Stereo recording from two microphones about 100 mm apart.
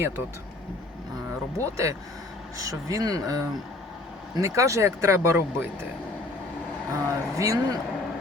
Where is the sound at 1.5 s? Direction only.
30° right (ahead or behind).